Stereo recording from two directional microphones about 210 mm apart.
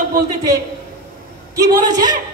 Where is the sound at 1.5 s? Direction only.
20° right (ahead or behind).